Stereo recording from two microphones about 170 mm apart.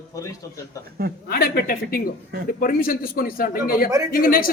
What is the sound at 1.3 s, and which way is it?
A man's voice, 60° left (ahead or behind).